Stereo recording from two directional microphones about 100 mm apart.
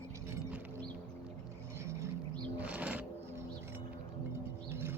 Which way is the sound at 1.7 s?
30° right (ahead or behind).